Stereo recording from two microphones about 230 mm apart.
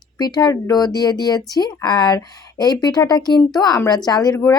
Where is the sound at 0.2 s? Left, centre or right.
Centre.